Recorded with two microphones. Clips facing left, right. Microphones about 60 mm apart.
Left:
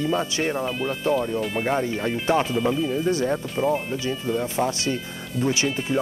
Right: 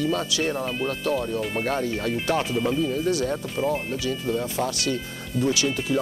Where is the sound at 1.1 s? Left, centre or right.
Centre.